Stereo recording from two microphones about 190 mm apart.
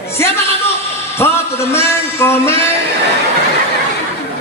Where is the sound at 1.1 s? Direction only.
15° left (ahead or behind).